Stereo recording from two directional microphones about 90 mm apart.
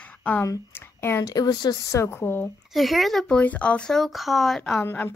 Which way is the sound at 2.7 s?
Centre (ahead or behind).